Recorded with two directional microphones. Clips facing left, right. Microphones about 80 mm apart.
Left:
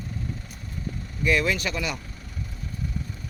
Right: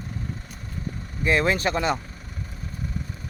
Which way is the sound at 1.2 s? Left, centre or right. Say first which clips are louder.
Right 2 dB; right.